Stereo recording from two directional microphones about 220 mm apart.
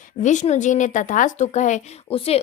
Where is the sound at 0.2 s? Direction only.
35° left (ahead or behind).